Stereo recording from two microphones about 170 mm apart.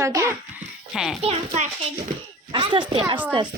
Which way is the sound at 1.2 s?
35° right (ahead or behind).